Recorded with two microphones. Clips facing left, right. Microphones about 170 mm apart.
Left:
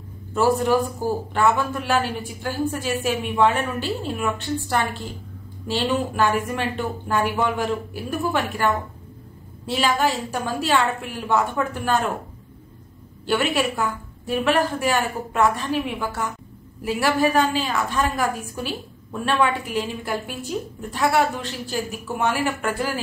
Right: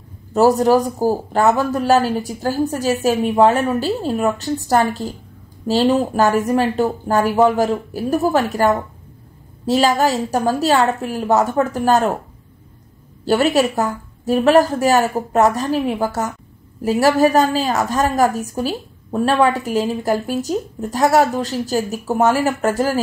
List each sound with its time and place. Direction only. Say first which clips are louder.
0.3 s a woman's voice: right 6 dB; 40° right (ahead or behind)
13.2 s a woman's voice: right 7 dB; 40° right (ahead or behind)